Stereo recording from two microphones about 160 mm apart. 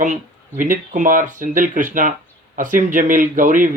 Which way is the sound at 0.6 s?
55° right (ahead or behind).